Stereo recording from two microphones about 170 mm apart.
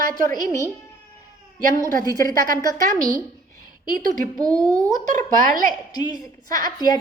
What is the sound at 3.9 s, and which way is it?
Speech, 55° right (ahead or behind).